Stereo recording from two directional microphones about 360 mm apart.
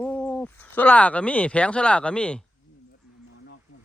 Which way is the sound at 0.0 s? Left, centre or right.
Centre.